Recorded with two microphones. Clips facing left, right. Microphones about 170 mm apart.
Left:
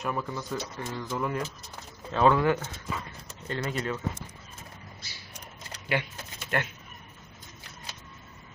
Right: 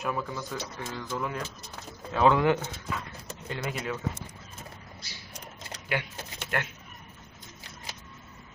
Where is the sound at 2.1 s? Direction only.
15° right (ahead or behind).